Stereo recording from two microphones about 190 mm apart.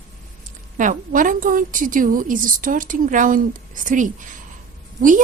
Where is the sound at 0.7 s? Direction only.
45° right (ahead or behind).